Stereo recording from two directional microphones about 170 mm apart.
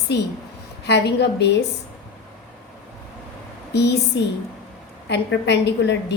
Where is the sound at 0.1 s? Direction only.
90° left.